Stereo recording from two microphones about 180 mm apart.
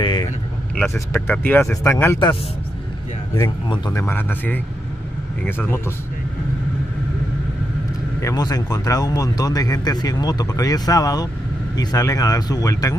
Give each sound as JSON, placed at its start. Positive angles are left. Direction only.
{"t": 0.0, "sound": "vehicle", "side_deg": 25}
{"t": 0.9, "sound": "speech", "side_deg": 15}
{"t": 3.3, "sound": "speech", "side_deg": 25}
{"t": 4.0, "sound": "speech", "side_deg": 10}
{"t": 8.2, "sound": "speech", "side_deg": 20}